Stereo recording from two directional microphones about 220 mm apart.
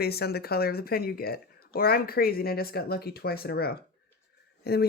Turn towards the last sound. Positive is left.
turn(degrees=45)  # may be behind; listen again after turning